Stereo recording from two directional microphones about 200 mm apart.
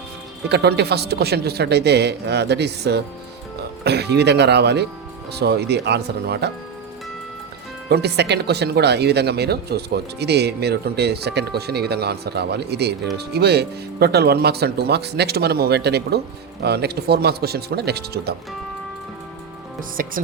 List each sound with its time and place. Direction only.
0.4 s speech: 55° right (ahead or behind)
7.9 s speech: 55° right (ahead or behind)
20.0 s speech: 45° right (ahead or behind)